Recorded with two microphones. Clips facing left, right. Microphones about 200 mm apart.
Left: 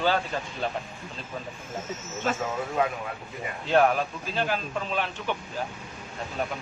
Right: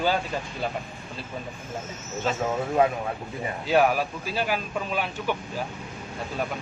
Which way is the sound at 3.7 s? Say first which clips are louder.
Even; 5° right (ahead or behind).